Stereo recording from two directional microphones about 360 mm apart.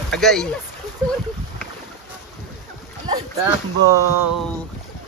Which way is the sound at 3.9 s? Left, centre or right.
Right.